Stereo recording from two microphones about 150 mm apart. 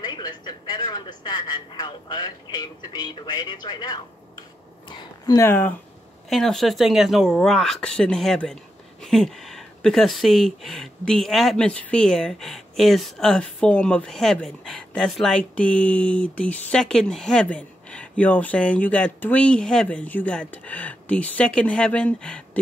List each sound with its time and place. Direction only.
0.0 s speech: 30° left (ahead or behind); by 5.8 s 15° left (ahead or behind)
6.3 s speech: centre (ahead or behind)